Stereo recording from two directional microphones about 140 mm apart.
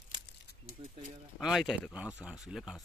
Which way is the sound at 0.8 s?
45° right (ahead or behind).